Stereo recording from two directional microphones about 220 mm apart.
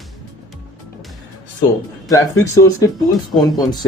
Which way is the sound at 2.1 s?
15° left (ahead or behind).